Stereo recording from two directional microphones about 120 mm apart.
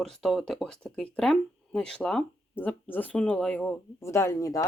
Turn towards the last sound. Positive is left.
turn(degrees=25)  # may be behind; listen again after turning